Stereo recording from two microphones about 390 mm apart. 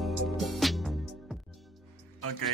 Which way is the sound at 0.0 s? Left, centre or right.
Centre.